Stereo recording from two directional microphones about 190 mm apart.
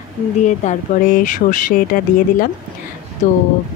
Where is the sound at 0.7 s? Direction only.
45° left (ahead or behind).